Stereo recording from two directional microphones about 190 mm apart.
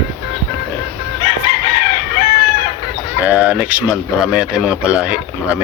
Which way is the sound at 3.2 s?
5° right (ahead or behind).